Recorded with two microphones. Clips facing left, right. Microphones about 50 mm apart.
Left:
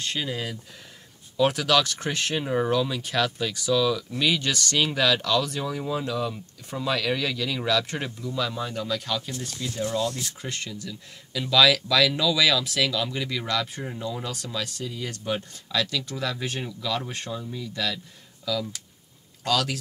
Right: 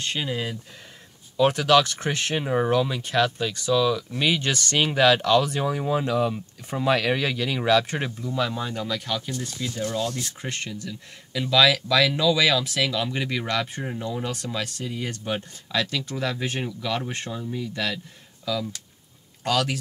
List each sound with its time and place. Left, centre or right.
0.1 s speech: centre
3.0 s speech: centre
8.5 s speech: right
9.0 s speech: centre; by 11.0 s right
11.5 s speech: centre
14.2 s speech: right
16.5 s speech: right
17.2 s speech: centre
17.6 s speech: right
18.4 s speech: right